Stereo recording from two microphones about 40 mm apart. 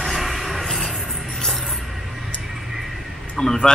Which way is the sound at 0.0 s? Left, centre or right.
Centre.